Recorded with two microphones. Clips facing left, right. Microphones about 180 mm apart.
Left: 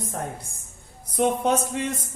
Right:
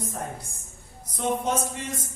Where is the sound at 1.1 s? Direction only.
60° left (ahead or behind).